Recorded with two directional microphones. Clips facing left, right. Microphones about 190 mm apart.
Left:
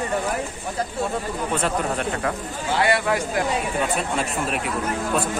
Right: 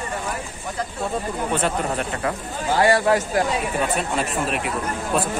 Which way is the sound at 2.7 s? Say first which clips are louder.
Right 4 dB; 40° right (ahead or behind).